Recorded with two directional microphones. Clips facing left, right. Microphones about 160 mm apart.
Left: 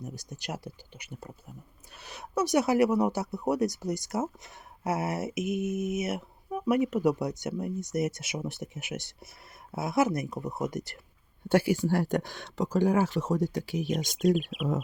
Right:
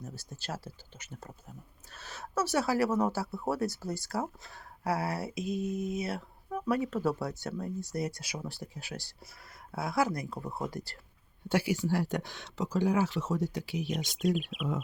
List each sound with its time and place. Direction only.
0.0 s speech: 15° left (ahead or behind)
11.4 s speech: 50° left (ahead or behind)